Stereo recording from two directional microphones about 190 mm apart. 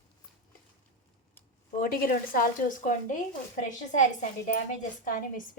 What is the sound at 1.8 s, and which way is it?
A woman's voice, 50° left (ahead or behind).